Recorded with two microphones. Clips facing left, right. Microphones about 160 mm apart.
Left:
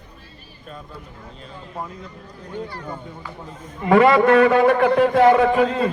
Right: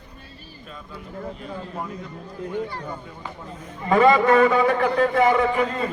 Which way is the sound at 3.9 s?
75° left (ahead or behind).